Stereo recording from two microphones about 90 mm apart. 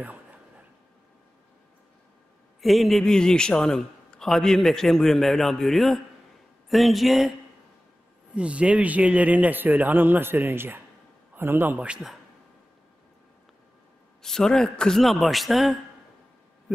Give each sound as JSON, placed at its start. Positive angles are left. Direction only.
{"t": 0.0, "sound": "a sound", "side_deg": -15}
{"t": 2.6, "sound": "a man's voice", "side_deg": 0}
{"t": 8.4, "sound": "a man's voice", "side_deg": -15}
{"t": 14.2, "sound": "a man's voice", "side_deg": 5}